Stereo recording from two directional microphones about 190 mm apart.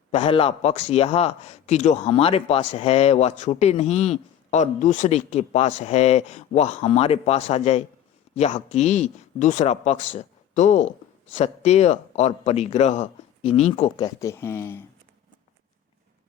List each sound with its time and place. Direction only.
0.1 s a man's voice: 30° left (ahead or behind)
13.9 s speech: 20° left (ahead or behind)